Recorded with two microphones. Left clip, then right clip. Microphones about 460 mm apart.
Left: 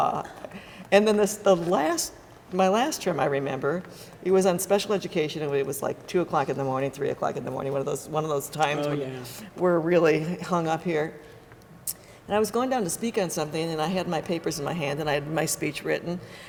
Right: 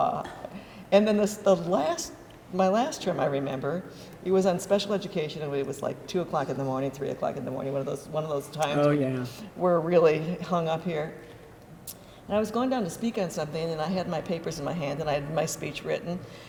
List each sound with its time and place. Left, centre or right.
0.9 s speech: left
12.3 s speech: left